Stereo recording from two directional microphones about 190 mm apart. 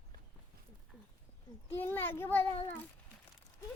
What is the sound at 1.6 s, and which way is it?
Speech, 10° left (ahead or behind).